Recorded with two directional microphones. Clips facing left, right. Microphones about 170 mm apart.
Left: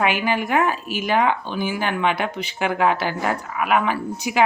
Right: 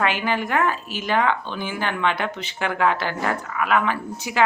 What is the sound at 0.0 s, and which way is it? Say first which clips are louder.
A woman's voice: left 2 dB; 10° left (ahead or behind).